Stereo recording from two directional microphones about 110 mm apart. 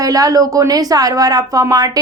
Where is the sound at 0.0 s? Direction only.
35° right (ahead or behind).